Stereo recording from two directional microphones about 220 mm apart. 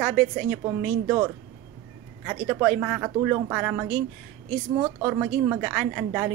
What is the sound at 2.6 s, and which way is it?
Speech, 5° right (ahead or behind).